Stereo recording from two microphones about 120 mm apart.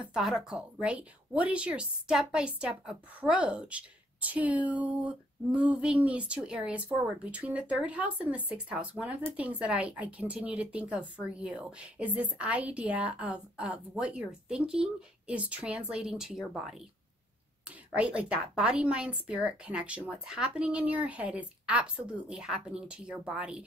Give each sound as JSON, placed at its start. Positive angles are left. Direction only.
{"t": 0.1, "sound": "a woman's voice", "side_deg": -5}